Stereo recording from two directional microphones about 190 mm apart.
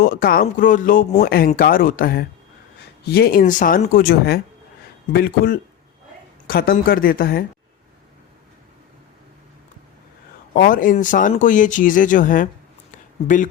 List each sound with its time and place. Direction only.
0.0 s speech: 50° left (ahead or behind)
10.5 s speech: 50° left (ahead or behind)
12.9 s a sound: 40° left (ahead or behind)